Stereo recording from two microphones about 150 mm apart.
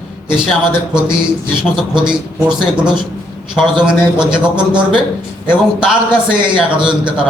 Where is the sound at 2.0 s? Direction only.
5° right (ahead or behind).